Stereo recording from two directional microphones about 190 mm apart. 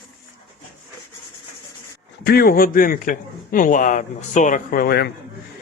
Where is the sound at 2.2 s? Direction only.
55° left (ahead or behind).